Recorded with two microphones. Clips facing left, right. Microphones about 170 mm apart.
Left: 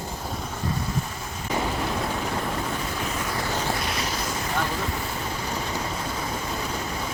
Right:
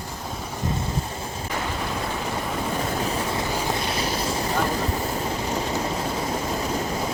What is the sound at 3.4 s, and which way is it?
Vehicle, 10° right (ahead or behind).